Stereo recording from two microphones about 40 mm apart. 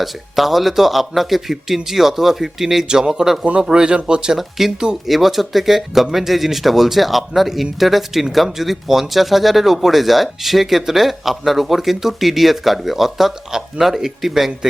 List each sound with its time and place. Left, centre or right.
0.0 s speech: centre
2.8 s speech: centre
4.4 s speech: centre